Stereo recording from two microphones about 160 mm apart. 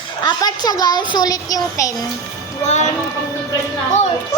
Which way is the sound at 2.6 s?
45° left (ahead or behind).